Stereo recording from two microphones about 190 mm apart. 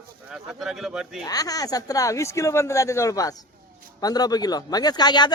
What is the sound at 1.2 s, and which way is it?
A man's voice, 20° left (ahead or behind).